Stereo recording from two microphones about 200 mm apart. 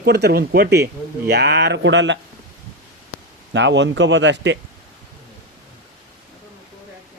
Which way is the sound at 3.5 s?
65° right (ahead or behind).